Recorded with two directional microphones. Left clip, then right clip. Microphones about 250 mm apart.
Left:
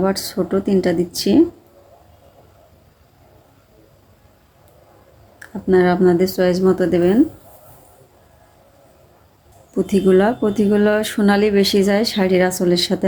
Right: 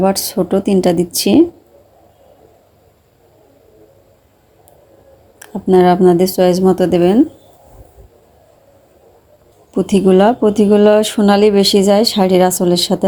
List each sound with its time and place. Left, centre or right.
0.0 s speech: right
5.4 s speech: right
9.7 s speech: right